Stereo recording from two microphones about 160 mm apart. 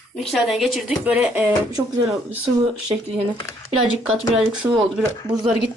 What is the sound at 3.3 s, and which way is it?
Speech, 20° left (ahead or behind).